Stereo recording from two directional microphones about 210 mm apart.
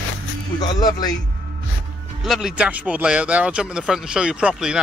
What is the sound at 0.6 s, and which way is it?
Speech, 20° left (ahead or behind).